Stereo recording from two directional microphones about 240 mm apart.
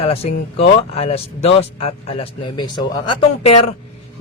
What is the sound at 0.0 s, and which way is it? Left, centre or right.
Speech, left.